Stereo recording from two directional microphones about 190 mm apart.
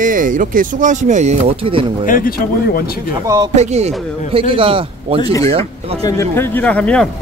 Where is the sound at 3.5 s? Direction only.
35° right (ahead or behind).